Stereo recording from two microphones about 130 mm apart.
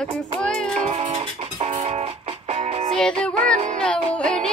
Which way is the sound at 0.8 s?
55° right (ahead or behind).